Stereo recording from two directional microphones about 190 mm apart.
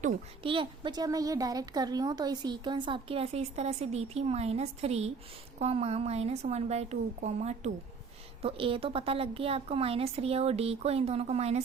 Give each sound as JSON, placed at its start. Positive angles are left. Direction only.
{"t": 0.4, "sound": "a woman's voice", "side_deg": -25}